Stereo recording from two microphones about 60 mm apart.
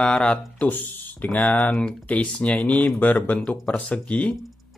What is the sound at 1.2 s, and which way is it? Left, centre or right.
Speech, left.